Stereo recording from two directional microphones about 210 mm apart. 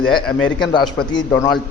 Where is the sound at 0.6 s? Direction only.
20° left (ahead or behind).